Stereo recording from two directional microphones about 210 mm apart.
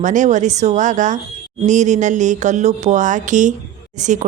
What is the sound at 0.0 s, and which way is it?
Speech, 35° right (ahead or behind).